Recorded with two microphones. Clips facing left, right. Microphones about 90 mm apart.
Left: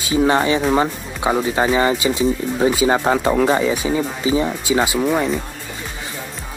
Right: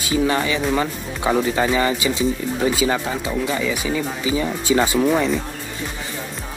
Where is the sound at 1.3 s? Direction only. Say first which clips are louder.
Even; 15° left (ahead or behind).